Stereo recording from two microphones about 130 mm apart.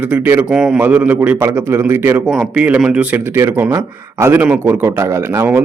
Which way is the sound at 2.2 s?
5° right (ahead or behind).